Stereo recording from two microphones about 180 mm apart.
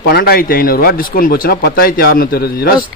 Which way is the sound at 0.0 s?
60° left (ahead or behind).